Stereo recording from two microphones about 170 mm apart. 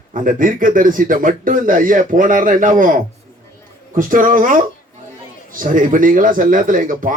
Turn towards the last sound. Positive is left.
turn(degrees=-50)  # may be behind; listen again after turning